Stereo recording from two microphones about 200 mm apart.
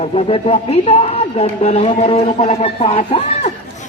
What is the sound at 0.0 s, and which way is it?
A man's voice, 30° left (ahead or behind).